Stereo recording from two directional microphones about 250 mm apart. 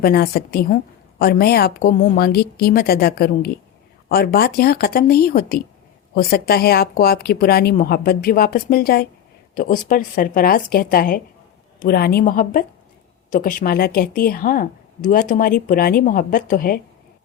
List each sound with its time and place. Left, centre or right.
0.0 s speech: left